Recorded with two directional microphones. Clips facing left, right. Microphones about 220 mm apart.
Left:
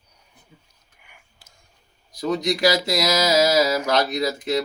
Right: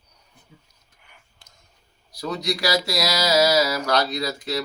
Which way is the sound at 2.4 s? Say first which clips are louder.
Left 2 dB; 20° left (ahead or behind).